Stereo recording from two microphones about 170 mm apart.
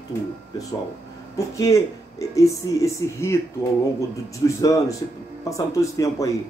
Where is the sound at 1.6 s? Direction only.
20° left (ahead or behind).